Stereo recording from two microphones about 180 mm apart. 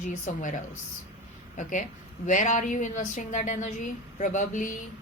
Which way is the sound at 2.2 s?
45° left (ahead or behind).